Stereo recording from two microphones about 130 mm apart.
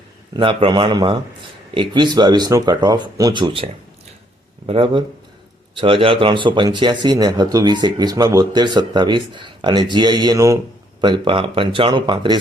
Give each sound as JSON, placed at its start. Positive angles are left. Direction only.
{"t": 0.3, "sound": "speech", "side_deg": -40}
{"t": 11.0, "sound": "speech", "side_deg": -40}